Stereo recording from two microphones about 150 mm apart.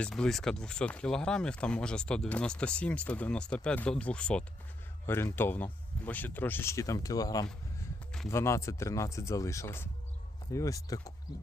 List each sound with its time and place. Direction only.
0.0 s speech: 5° left (ahead or behind); by 11.1 s 25° left (ahead or behind)